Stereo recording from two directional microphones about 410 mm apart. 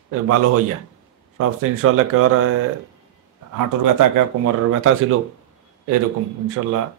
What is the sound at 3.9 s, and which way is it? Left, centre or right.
Speech, right.